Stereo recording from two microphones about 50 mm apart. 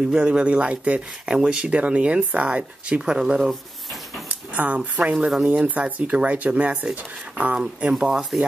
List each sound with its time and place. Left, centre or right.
0.2 s speech: right
3.3 s a sound: centre
4.6 s speech: right
5.1 s speech: centre
5.5 s speech: right
7.5 s speech: centre